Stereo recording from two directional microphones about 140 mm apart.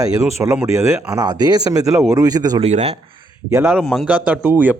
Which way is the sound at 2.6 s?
50° right (ahead or behind).